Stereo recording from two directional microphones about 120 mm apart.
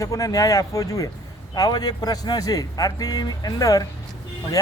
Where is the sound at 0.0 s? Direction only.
30° left (ahead or behind).